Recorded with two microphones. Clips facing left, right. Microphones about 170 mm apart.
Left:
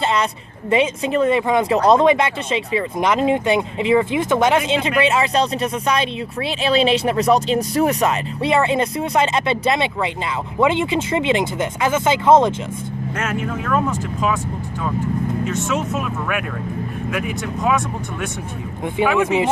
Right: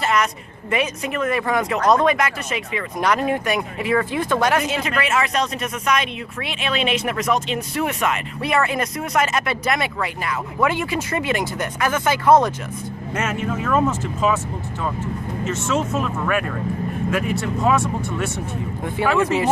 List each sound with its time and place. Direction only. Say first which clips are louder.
0.0 s a sound: left 1 dB; 25° left (ahead or behind)
0.7 s speech: left 5 dB; 30° left (ahead or behind)
13.1 s speech: right 1 dB; centre (ahead or behind)
15.4 s speech: even; centre (ahead or behind)